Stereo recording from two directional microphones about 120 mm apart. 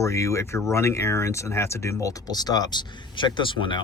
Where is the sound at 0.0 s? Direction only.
25° left (ahead or behind); by 3.8 s 40° left (ahead or behind).